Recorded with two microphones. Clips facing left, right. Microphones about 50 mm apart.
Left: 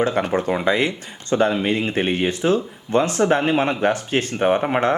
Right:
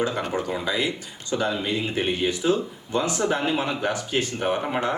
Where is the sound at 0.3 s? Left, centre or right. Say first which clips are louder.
Left 7 dB; left.